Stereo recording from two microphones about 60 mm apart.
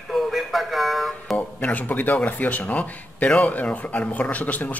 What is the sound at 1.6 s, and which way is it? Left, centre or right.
Speech, left.